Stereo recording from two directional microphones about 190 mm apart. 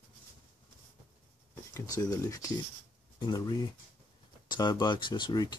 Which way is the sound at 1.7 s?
20° left (ahead or behind).